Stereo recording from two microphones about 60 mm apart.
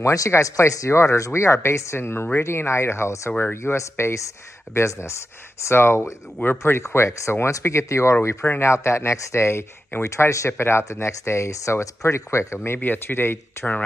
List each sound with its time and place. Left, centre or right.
0.0 s speech: left
0.3 s speech: left
12.6 s speech: left